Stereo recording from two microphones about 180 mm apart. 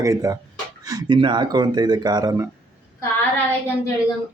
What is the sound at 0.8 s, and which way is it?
Speech, 20° right (ahead or behind).